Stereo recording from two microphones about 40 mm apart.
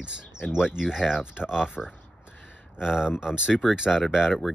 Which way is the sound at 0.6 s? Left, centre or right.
Centre.